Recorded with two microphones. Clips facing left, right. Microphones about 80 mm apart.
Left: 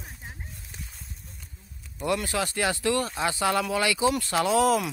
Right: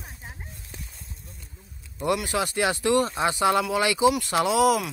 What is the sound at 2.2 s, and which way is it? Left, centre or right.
Speech, centre.